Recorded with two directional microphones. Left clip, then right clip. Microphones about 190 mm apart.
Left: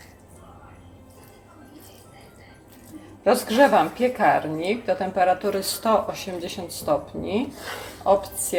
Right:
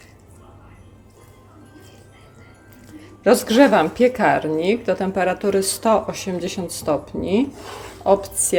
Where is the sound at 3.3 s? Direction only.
60° right (ahead or behind).